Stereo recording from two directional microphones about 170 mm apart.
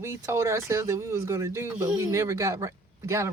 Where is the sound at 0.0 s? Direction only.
15° right (ahead or behind).